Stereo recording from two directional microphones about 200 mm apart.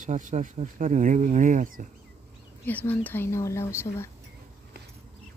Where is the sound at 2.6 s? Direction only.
10° left (ahead or behind).